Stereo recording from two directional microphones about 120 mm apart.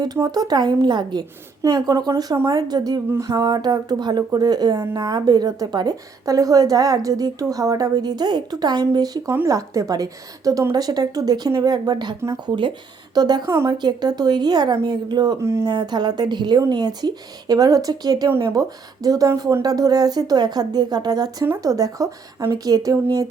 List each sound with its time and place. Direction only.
0.0 s speech: 35° right (ahead or behind)
9.3 s speech: 25° right (ahead or behind)
15.4 s a woman's voice: 25° right (ahead or behind)
15.7 s a woman's voice: 35° right (ahead or behind)